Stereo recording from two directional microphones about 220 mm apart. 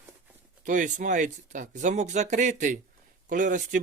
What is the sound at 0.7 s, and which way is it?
Speech, 35° right (ahead or behind).